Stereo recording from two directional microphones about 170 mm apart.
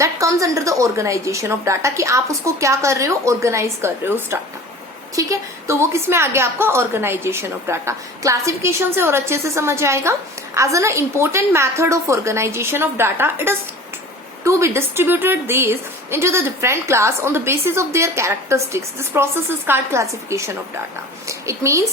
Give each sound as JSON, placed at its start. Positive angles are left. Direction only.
{"t": 0.0, "sound": "a woman's voice", "side_deg": -20}